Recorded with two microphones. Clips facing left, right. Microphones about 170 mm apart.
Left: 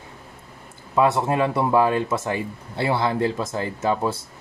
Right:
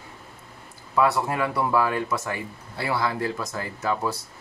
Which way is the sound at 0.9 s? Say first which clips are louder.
Left 3 dB; 25° left (ahead or behind).